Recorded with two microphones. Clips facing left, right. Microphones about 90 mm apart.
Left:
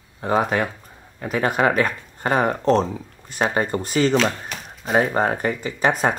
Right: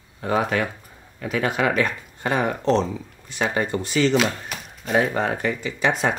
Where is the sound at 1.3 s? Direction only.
35° left (ahead or behind).